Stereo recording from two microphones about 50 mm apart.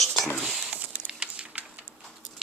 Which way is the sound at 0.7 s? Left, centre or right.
Right.